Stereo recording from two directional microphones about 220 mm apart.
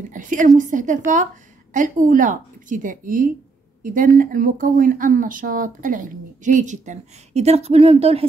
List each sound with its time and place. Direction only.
0.1 s speech: 35° right (ahead or behind)